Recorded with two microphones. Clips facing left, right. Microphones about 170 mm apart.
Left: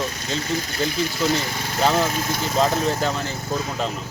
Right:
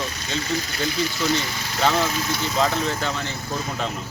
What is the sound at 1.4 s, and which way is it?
Speech, 50° left (ahead or behind).